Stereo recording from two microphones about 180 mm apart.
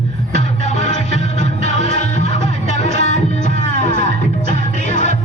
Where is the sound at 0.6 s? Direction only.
40° left (ahead or behind).